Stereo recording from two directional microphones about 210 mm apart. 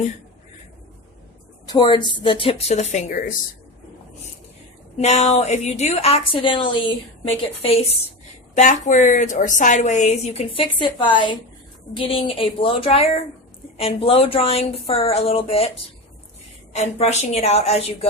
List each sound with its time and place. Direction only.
1.6 s a woman's voice: 20° left (ahead or behind); by 3.3 s 40° left (ahead or behind)
4.9 s a woman's voice: 30° left (ahead or behind)